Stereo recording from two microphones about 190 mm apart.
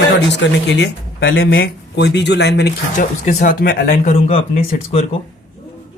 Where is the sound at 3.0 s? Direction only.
40° left (ahead or behind).